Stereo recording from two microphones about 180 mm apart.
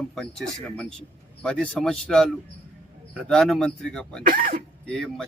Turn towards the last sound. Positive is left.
turn(degrees=5)  # may be behind; listen again after turning